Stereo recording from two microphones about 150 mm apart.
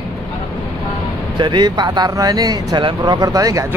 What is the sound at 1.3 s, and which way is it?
Speech, 30° right (ahead or behind).